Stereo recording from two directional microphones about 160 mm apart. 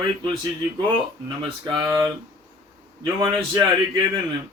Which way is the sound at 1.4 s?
30° right (ahead or behind).